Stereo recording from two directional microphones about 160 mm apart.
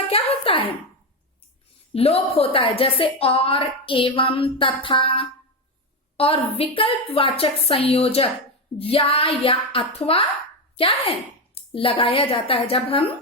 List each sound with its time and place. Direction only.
0.1 s speech: 35° left (ahead or behind)
1.9 s a woman's voice: 40° left (ahead or behind)